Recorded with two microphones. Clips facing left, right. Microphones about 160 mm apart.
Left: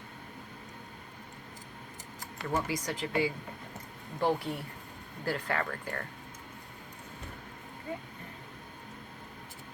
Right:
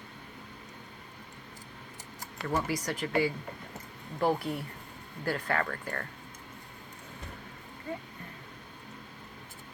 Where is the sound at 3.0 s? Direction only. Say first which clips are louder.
Right 3 dB; 25° left (ahead or behind).